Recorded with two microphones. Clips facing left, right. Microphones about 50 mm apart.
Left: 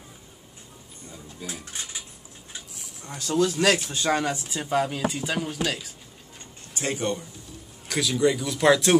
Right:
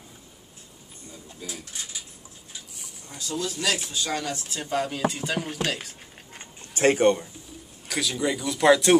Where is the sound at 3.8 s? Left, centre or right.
Left.